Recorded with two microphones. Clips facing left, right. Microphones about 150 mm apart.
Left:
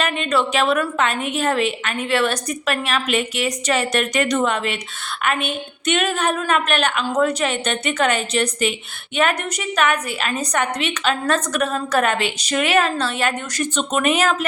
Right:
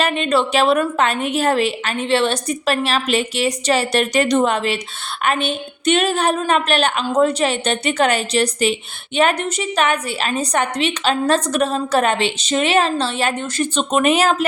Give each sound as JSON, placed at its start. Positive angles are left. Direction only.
{"t": 0.0, "sound": "a woman's voice", "side_deg": -30}